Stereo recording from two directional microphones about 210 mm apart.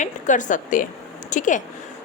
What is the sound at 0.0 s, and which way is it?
A woman's voice, 35° left (ahead or behind).